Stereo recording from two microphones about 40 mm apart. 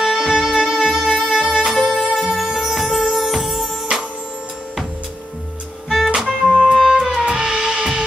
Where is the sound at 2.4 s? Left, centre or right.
Centre.